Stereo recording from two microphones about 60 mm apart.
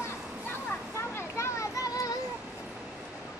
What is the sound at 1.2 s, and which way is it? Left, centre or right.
Children playing, left.